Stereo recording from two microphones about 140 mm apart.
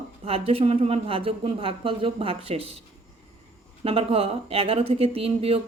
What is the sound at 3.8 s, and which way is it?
Speech, 45° right (ahead or behind).